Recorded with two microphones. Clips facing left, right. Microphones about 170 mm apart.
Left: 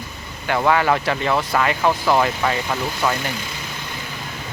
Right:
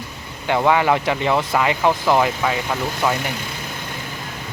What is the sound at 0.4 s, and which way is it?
Speech, 15° right (ahead or behind).